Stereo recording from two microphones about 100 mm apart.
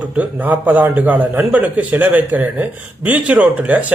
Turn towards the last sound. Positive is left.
turn(degrees=-15)  # may be behind; listen again after turning